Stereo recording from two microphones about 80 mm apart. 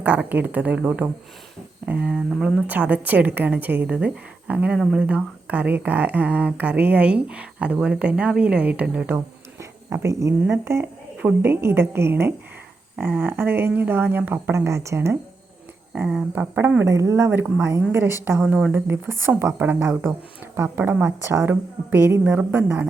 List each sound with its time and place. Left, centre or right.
0.0 s a woman's voice: right
2.6 s a woman's voice: centre
4.8 s speech: centre
9.1 s a sound: right
10.5 s a woman's voice: right
16.3 s a woman's voice: right
16.8 s a woman's voice: right; by 22.9 s centre